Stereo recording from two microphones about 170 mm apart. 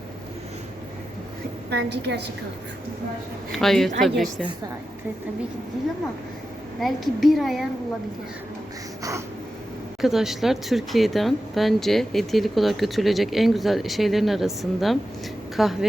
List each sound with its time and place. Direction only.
1.7 s a woman's voice: 80° right
3.5 s speech: centre (ahead or behind)
6.7 s speech: centre (ahead or behind)
10.0 s speech: centre (ahead or behind)